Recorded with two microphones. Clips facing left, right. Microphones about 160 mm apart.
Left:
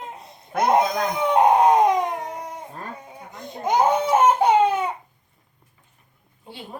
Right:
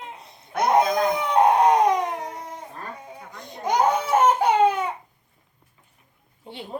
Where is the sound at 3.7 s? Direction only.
25° left (ahead or behind).